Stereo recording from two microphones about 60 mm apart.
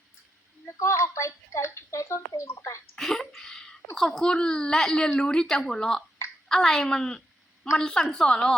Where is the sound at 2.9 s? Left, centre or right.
Centre.